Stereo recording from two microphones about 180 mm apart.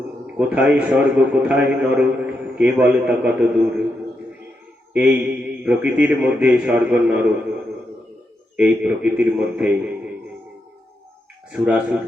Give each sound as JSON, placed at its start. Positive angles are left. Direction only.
{"t": 0.3, "sound": "a man's voice", "side_deg": -10}
{"t": 4.9, "sound": "a man's voice", "side_deg": -5}
{"t": 8.5, "sound": "a man's voice", "side_deg": -5}
{"t": 11.5, "sound": "a man's voice", "side_deg": -5}